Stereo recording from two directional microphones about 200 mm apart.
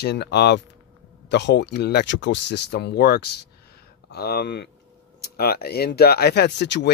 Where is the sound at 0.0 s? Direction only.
55° left (ahead or behind).